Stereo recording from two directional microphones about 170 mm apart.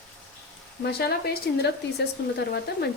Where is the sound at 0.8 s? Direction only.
70° left (ahead or behind).